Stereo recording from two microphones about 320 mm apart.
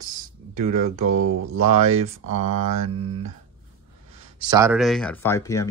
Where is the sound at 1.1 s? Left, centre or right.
Right.